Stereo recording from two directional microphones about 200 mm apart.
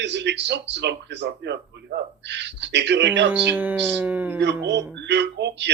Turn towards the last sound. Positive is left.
turn(degrees=-60)  # may be behind; listen again after turning